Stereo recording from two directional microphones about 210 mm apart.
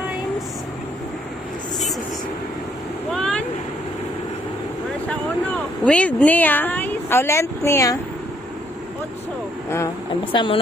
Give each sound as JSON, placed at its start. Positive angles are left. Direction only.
{"t": 3.1, "sound": "vehicle", "side_deg": 5}
{"t": 5.9, "sound": "a woman's voice", "side_deg": 5}
{"t": 10.3, "sound": "speech", "side_deg": 25}